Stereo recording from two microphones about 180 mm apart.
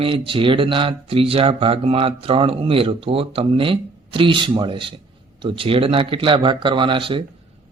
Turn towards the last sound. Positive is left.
turn(degrees=-30)  # may be behind; listen again after turning